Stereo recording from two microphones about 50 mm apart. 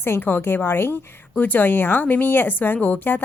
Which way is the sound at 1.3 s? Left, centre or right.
Left.